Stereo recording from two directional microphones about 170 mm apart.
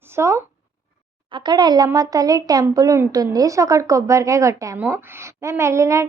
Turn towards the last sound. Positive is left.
turn(degrees=-15)  # may be behind; listen again after turning